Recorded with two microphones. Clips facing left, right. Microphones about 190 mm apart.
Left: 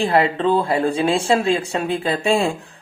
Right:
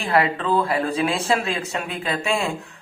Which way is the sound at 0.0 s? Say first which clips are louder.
Left 4 dB; 30° left (ahead or behind).